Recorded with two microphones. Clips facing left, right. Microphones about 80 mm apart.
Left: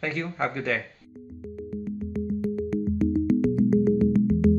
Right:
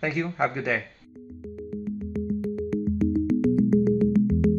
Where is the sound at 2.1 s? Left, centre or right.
Centre.